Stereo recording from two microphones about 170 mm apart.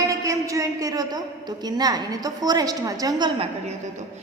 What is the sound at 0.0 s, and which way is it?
A woman's voice, 20° right (ahead or behind).